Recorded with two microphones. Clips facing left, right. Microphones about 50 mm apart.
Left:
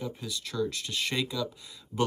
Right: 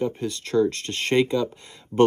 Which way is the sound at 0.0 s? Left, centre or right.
Right.